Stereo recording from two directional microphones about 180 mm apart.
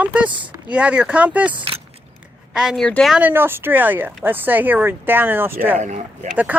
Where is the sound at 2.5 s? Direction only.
5° right (ahead or behind).